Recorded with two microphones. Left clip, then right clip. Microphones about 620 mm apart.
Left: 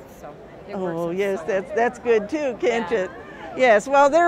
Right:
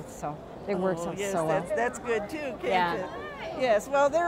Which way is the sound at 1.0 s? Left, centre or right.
Left.